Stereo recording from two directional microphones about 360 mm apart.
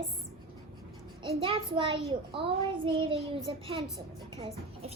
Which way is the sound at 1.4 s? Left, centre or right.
Centre.